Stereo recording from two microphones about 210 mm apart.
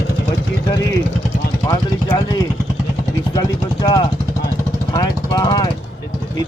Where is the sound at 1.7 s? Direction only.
15° left (ahead or behind).